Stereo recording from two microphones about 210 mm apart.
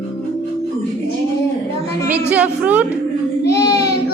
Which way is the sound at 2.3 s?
5° right (ahead or behind).